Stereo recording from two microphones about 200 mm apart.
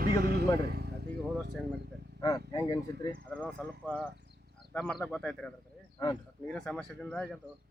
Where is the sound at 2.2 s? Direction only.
15° left (ahead or behind).